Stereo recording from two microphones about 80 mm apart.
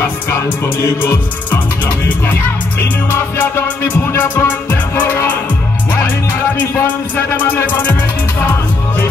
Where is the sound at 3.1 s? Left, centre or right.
Left.